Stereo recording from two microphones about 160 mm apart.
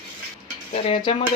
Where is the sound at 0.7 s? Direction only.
35° left (ahead or behind).